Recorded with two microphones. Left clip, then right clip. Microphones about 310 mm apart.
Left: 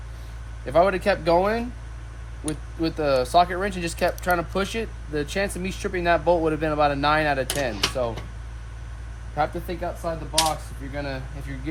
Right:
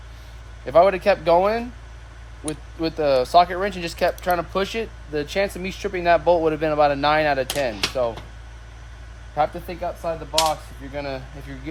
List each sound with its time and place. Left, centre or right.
0.6 s speech: centre
2.8 s speech: centre
9.3 s speech: centre